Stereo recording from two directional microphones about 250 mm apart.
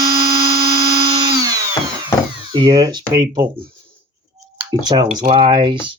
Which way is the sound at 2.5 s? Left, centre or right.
Centre.